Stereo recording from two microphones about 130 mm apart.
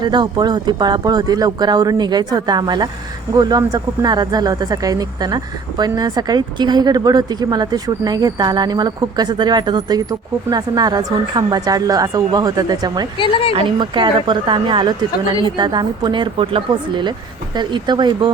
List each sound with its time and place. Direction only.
0.0 s speech: 35° right (ahead or behind)
13.1 s speech: 40° left (ahead or behind)
13.6 s speech: 40° right (ahead or behind)